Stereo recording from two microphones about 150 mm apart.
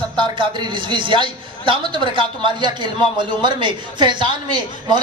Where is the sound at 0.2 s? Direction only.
30° right (ahead or behind).